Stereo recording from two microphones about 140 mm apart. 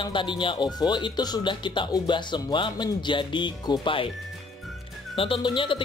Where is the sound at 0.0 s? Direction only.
35° left (ahead or behind).